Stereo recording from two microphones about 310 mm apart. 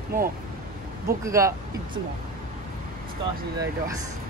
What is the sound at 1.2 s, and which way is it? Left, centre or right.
Speech, centre.